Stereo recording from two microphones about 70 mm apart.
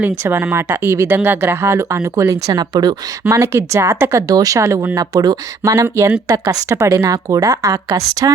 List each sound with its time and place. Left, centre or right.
0.3 s speech: right
3.2 s speech: right
4.9 s speech: right